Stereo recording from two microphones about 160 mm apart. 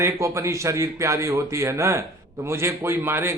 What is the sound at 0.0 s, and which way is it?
A man's voice, 20° right (ahead or behind).